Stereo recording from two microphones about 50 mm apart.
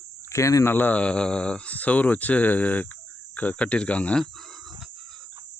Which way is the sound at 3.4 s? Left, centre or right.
Left.